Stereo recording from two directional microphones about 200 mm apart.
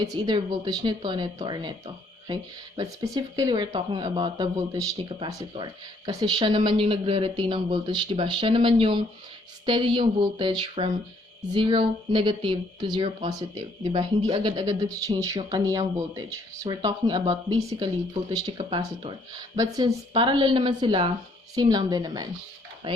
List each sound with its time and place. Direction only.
0.0 s speech: 20° right (ahead or behind)